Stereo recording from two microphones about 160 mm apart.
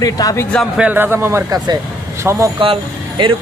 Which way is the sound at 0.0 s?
20° left (ahead or behind).